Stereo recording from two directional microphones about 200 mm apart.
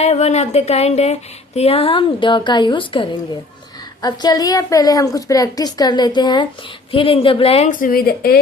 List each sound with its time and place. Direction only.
0.0 s a woman's voice: 35° left (ahead or behind); by 8.4 s 50° left (ahead or behind)